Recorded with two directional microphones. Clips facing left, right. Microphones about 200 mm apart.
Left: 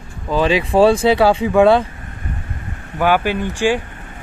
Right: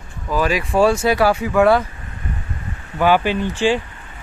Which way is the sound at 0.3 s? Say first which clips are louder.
Left 3 dB; 25° left (ahead or behind).